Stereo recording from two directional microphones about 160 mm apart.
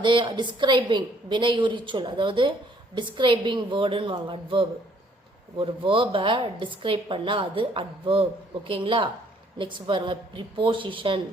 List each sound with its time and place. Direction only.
0.0 s a woman's voice: 30° right (ahead or behind)